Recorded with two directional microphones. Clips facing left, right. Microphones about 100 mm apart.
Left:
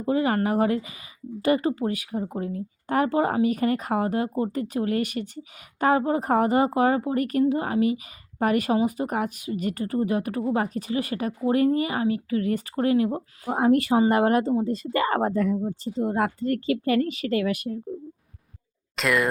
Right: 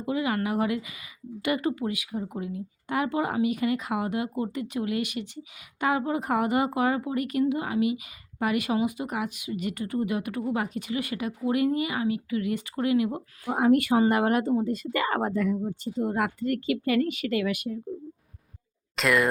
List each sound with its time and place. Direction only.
0.0 s a woman's voice: 40° left (ahead or behind)
18.9 s speech: centre (ahead or behind)